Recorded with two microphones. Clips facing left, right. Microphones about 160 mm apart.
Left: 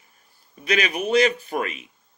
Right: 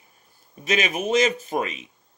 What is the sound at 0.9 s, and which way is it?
Speech, 40° right (ahead or behind).